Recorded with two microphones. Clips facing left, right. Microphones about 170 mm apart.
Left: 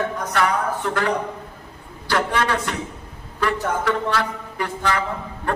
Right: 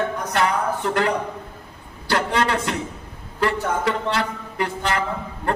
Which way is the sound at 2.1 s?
20° right (ahead or behind).